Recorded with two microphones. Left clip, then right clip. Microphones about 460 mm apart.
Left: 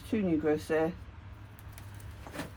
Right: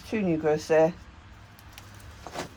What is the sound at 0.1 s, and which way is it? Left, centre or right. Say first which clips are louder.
Speech: right 4 dB; centre.